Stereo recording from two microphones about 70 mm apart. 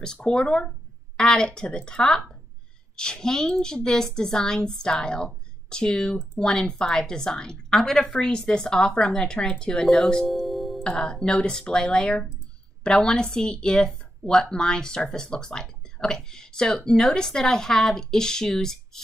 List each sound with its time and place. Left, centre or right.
0.0 s a woman's voice: centre
10.2 s music: centre
10.8 s a woman's voice: centre